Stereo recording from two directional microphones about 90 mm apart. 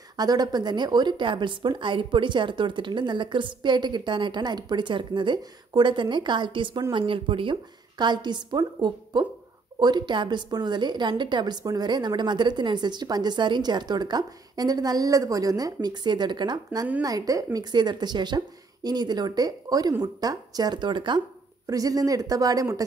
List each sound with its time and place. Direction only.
0.2 s a woman's voice: 50° right (ahead or behind); by 7.5 s 75° right (ahead or behind)
8.0 s a woman's voice: 55° right (ahead or behind)
17.0 s a woman's voice: 40° right (ahead or behind); by 21.2 s 60° right (ahead or behind)
21.6 s speech: 40° right (ahead or behind)